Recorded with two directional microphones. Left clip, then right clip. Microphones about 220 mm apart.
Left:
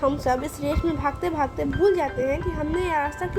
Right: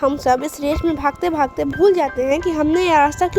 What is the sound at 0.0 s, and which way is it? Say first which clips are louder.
A woman's voice: right 6 dB; 40° right (ahead or behind).